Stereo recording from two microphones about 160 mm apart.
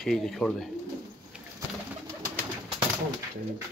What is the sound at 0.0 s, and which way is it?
Speech, centre (ahead or behind).